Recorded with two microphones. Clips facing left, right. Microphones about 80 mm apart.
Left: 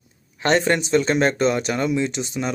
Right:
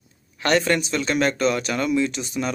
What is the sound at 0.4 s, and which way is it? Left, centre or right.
Speech, left.